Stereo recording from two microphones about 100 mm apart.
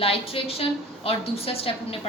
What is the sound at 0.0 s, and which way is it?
A woman's voice, 75° left (ahead or behind).